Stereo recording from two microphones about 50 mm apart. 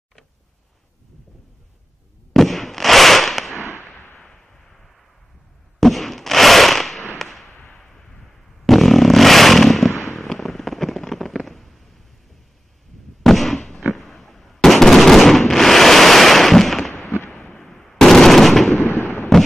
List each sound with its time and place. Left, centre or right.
2.3 s fireworks: centre
4.2 s a sound: centre
5.8 s fireworks: centre
7.2 s a sound: centre
13.2 s fireworks: centre
18.9 s fireworks: left